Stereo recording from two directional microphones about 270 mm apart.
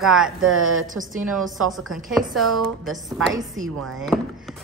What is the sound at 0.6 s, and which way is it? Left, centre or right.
Speech, right.